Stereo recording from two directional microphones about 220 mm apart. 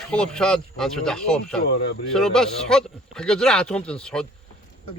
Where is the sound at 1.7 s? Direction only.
50° left (ahead or behind).